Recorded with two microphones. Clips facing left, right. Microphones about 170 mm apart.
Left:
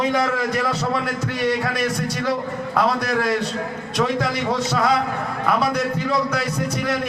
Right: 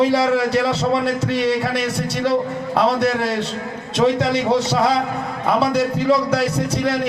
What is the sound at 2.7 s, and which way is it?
A man's voice, 30° right (ahead or behind).